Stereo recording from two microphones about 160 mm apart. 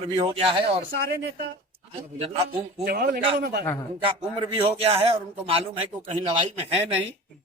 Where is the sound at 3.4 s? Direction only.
85° right.